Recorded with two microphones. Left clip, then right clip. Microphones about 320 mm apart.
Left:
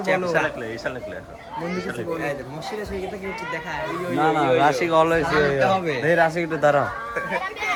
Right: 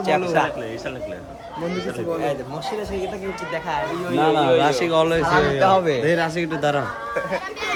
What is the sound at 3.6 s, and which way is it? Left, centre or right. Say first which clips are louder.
Speech: right 5 dB; centre.